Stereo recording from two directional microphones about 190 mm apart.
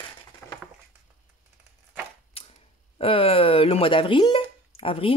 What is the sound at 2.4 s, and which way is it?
Cap gun, 30° left (ahead or behind).